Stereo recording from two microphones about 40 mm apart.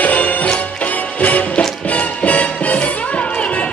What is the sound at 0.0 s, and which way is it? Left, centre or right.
Music, left.